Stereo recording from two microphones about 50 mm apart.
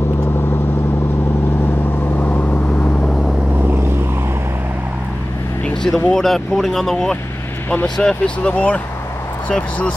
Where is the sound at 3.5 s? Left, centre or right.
Right.